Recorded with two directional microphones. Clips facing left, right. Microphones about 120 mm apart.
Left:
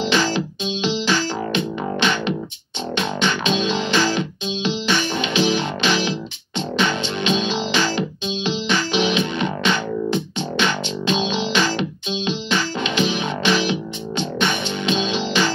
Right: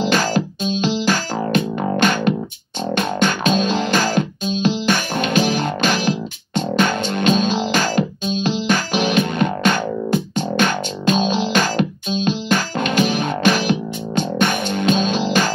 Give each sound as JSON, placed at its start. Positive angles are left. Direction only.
{"t": 0.0, "sound": "music", "side_deg": -45}